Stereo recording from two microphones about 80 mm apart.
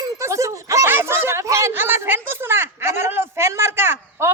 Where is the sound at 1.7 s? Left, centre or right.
Right.